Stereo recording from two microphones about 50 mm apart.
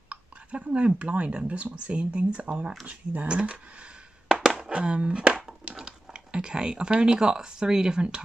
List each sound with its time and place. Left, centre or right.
0.1 s speech: right
4.3 s a sound: centre
4.7 s speech: right